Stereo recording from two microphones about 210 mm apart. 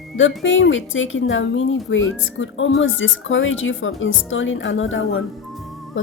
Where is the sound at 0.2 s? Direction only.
65° left (ahead or behind).